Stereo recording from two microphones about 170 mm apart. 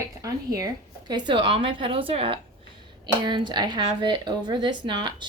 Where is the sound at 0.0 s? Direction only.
20° right (ahead or behind).